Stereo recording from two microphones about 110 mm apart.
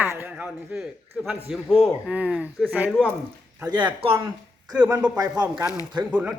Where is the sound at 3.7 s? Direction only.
45° right (ahead or behind).